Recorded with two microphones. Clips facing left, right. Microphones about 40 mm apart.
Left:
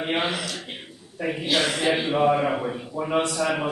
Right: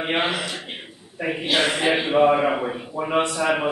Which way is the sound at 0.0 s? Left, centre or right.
Right.